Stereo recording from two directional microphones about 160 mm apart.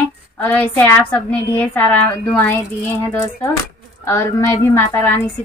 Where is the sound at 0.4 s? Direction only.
10° left (ahead or behind).